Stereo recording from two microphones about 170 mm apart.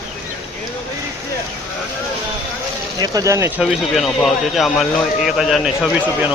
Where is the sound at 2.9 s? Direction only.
20° right (ahead or behind).